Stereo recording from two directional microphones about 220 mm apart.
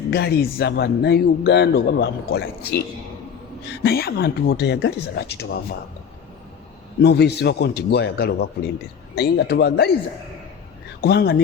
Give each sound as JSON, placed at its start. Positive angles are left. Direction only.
{"t": 0.1, "sound": "a man's voice", "side_deg": 50}
{"t": 7.0, "sound": "a man's voice", "side_deg": 45}
{"t": 11.0, "sound": "a man's voice", "side_deg": 45}